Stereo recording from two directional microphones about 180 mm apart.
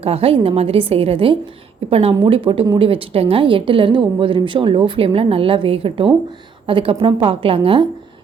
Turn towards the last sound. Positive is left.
turn(degrees=-30)  # may be behind; listen again after turning